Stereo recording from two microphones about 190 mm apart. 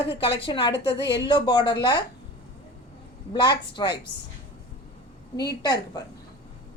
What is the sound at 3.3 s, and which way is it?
Speech, 25° left (ahead or behind).